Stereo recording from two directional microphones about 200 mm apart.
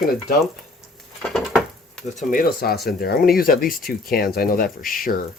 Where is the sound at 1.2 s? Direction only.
Centre (ahead or behind).